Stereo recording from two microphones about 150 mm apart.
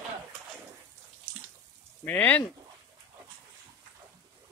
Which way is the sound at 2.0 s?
10° left (ahead or behind).